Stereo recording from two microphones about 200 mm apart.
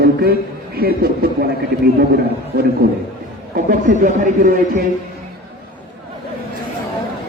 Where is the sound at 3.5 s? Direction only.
45° right (ahead or behind).